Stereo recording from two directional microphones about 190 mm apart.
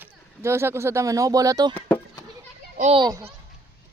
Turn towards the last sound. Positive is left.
turn(degrees=-30)  # may be behind; listen again after turning